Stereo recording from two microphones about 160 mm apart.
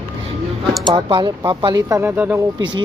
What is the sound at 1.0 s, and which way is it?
Speech, 30° right (ahead or behind).